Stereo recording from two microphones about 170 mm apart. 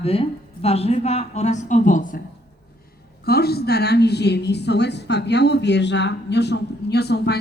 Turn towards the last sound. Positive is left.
turn(degrees=75)  # may be behind; listen again after turning